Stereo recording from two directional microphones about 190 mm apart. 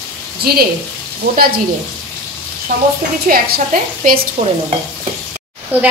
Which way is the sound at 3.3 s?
50° right (ahead or behind).